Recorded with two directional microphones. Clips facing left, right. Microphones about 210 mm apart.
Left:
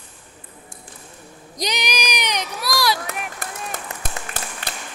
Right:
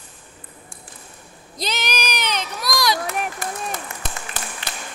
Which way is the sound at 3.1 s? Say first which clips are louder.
Right 4 dB; 55° left (ahead or behind).